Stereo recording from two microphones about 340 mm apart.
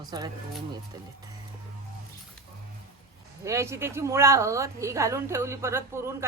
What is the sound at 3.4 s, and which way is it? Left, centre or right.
A woman's voice, centre.